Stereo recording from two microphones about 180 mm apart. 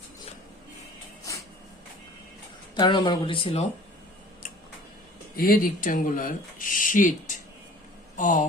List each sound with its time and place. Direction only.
2.7 s speech: 25° left (ahead or behind)
5.4 s speech: 50° left (ahead or behind)